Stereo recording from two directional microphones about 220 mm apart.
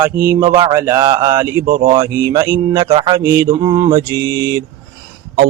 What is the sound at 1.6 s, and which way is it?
Speech, 40° right (ahead or behind).